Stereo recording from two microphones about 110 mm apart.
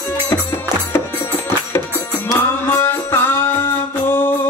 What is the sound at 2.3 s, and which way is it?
Music, 20° left (ahead or behind).